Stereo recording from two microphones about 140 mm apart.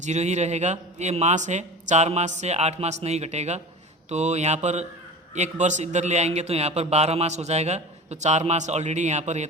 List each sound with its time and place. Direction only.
0.0 s a man's voice: 55° right (ahead or behind)